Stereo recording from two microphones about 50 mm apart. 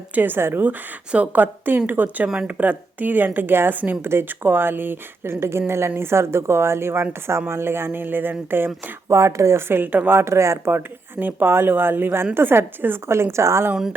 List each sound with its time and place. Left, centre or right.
0.1 s speech: right
0.3 s a woman's voice: right
1.1 s speech: right
4.0 s a woman's voice: right
9.0 s a woman's voice: right
10.2 s a woman's voice: right
11.2 s a woman's voice: right
13.1 s a woman's voice: right